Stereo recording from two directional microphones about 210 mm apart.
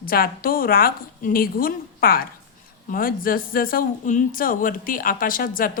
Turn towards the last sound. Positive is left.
turn(degrees=40)  # may be behind; listen again after turning